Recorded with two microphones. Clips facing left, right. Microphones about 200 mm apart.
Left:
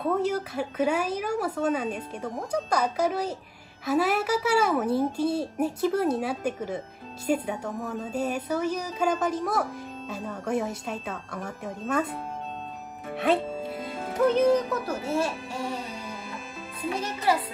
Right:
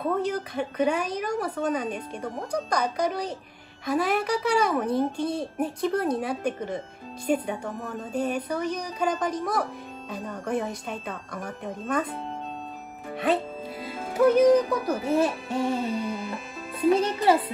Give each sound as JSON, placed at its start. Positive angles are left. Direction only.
{"t": 0.0, "sound": "a woman's voice", "side_deg": 5}
{"t": 13.1, "sound": "music", "side_deg": 0}